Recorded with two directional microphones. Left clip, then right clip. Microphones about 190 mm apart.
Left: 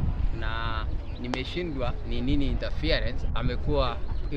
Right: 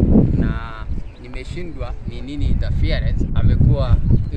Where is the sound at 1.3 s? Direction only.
45° left (ahead or behind).